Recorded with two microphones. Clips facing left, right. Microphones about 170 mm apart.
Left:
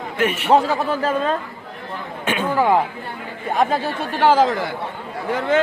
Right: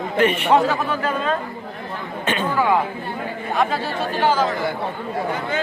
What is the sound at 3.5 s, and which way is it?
Speech, 45° left (ahead or behind).